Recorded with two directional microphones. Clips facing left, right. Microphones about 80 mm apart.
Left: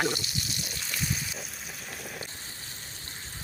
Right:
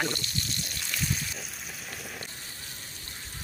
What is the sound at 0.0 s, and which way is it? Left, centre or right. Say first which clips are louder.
Frying: left 2 dB; centre.